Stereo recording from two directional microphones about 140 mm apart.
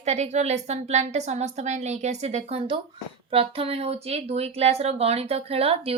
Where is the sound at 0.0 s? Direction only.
55° right (ahead or behind).